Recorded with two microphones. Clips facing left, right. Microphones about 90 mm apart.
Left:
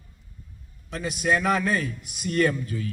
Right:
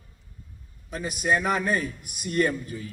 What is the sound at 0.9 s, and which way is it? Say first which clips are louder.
Speech: left 1 dB; 5° right (ahead or behind).